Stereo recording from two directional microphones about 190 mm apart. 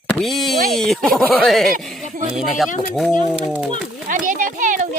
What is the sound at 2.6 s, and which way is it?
Speech, 40° left (ahead or behind).